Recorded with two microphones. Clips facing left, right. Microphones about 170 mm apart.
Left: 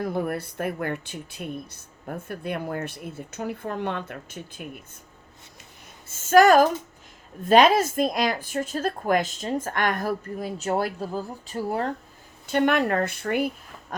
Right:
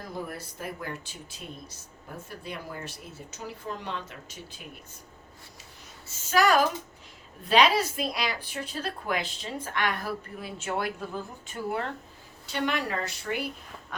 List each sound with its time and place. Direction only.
0.0 s speech: 60° left (ahead or behind)
6.1 s speech: 50° left (ahead or behind)
12.5 s speech: 55° left (ahead or behind)